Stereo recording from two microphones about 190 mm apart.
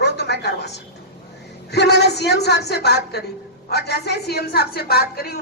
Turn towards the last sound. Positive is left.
turn(degrees=55)  # may be behind; listen again after turning